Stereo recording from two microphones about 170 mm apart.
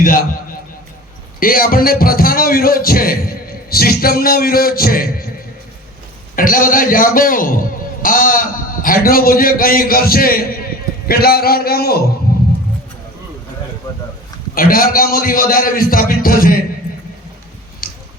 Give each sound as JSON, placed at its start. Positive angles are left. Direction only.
{"t": 0.0, "sound": "a man's voice", "side_deg": 55}
{"t": 1.4, "sound": "a man's voice", "side_deg": 55}
{"t": 6.3, "sound": "a man's voice", "side_deg": 55}
{"t": 12.3, "sound": "a sound", "side_deg": 60}
{"t": 14.5, "sound": "a man's voice", "side_deg": 60}
{"t": 17.8, "sound": "a sound", "side_deg": 60}